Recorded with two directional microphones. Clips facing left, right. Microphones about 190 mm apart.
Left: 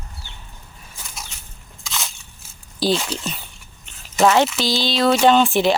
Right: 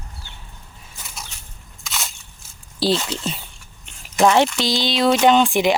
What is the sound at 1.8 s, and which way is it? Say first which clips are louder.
Crushing: even; centre (ahead or behind).